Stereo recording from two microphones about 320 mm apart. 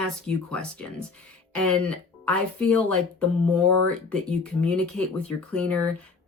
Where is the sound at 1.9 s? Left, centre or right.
Centre.